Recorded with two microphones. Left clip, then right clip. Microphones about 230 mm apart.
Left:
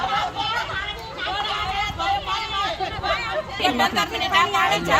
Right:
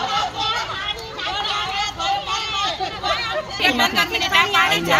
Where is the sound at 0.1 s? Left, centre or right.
Centre.